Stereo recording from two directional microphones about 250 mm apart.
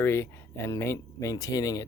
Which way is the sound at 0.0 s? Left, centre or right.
Centre.